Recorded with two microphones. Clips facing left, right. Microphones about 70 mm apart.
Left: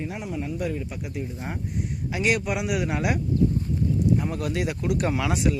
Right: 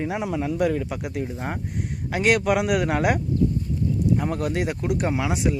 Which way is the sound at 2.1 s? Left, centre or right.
Right.